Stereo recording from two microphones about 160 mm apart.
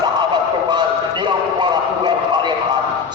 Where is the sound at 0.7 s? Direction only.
30° right (ahead or behind).